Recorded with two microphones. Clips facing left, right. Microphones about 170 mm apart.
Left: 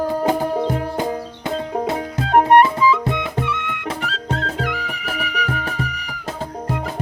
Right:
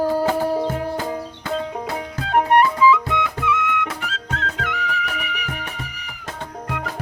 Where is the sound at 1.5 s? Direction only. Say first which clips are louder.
Left 3 dB; 40° left (ahead or behind).